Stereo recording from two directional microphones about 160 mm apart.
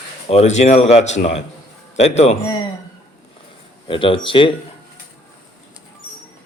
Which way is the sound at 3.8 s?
30° left (ahead or behind).